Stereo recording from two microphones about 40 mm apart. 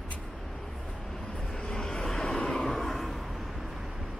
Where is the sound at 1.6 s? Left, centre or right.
Centre.